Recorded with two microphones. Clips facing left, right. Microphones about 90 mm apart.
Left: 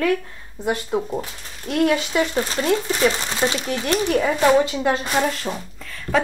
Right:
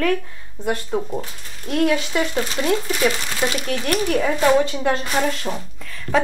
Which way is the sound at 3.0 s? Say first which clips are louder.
Left 2 dB; 30° left (ahead or behind).